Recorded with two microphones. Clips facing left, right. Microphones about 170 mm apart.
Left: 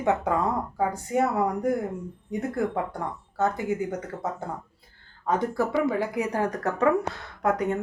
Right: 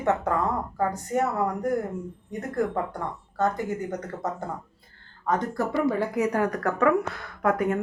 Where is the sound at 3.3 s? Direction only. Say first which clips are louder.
Even; 10° left (ahead or behind).